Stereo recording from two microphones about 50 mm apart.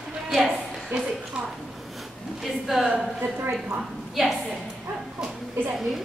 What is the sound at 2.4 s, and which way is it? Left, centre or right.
Speech, centre.